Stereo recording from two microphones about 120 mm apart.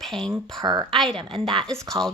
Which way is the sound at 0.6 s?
40° right (ahead or behind).